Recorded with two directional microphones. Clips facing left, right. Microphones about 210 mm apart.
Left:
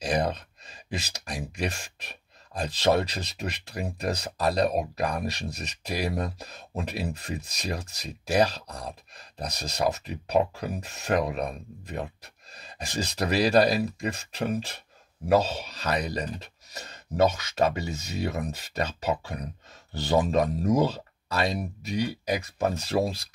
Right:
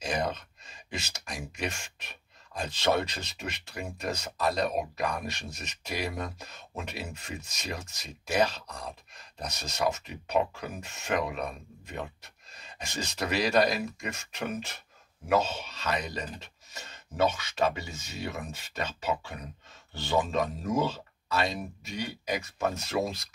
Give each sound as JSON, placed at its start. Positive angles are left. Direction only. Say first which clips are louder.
{"t": 0.0, "sound": "speech", "louder": "left 4 dB", "side_deg": 35}